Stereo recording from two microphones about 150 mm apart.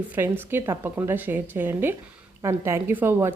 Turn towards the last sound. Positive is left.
turn(degrees=-15)  # may be behind; listen again after turning